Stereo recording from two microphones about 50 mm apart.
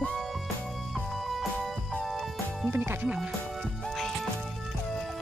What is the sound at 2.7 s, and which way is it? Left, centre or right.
Speech, right.